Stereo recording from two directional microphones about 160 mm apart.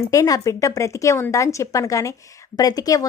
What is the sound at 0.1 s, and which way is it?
A woman's voice, 20° left (ahead or behind).